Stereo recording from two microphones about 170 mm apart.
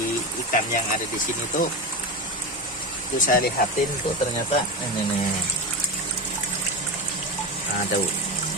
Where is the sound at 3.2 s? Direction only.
55° left (ahead or behind).